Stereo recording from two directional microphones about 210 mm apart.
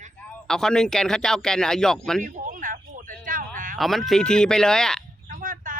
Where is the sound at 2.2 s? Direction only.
35° right (ahead or behind).